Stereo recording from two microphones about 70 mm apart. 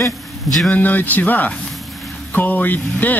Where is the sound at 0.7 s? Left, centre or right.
Left.